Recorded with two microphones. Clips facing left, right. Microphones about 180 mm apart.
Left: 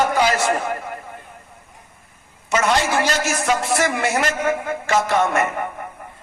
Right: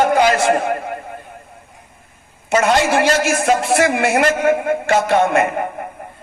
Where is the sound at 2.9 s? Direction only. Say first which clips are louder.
Right 5 dB; 30° right (ahead or behind).